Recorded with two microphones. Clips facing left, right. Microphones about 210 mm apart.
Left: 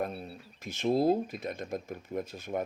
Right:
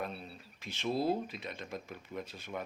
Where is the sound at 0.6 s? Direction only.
45° left (ahead or behind).